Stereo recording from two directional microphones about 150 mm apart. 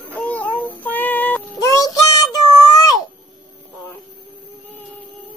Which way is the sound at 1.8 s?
25° left (ahead or behind).